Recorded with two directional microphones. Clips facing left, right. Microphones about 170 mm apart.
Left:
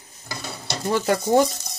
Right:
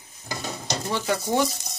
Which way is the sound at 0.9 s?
45° left (ahead or behind).